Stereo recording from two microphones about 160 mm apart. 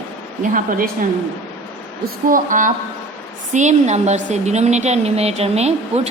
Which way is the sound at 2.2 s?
55° right (ahead or behind).